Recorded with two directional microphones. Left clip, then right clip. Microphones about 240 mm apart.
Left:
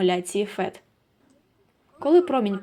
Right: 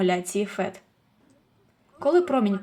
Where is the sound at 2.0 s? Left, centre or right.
Centre.